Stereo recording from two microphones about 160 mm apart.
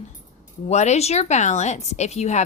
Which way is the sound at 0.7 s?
45° left (ahead or behind).